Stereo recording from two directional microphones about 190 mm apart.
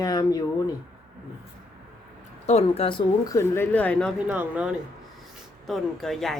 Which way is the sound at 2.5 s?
35° left (ahead or behind).